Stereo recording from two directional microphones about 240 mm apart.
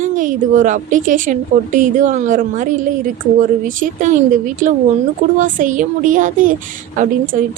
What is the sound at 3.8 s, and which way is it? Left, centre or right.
A woman's voice, right.